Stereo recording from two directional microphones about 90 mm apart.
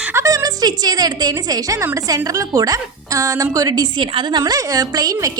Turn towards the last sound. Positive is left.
turn(degrees=-40)  # may be behind; listen again after turning